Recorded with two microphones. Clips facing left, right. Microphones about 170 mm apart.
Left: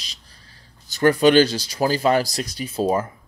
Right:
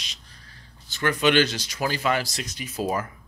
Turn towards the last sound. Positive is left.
turn(degrees=30)  # may be behind; listen again after turning